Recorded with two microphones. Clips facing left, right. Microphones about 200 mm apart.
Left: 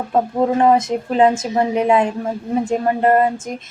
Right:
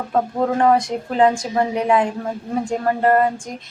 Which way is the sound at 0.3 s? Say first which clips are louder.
Left 2 dB; 20° left (ahead or behind).